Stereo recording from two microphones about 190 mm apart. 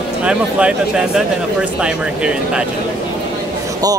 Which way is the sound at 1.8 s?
5° right (ahead or behind).